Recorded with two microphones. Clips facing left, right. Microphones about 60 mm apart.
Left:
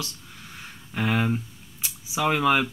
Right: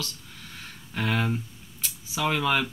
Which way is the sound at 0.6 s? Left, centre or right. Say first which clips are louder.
Left 2 dB; centre.